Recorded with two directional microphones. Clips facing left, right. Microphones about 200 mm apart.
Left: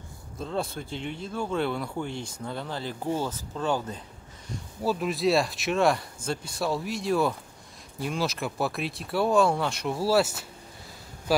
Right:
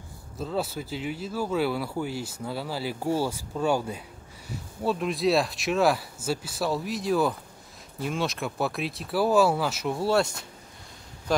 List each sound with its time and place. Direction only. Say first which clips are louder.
0.4 s speech: right 1 dB; 5° right (ahead or behind)
4.5 s speech: even; centre (ahead or behind)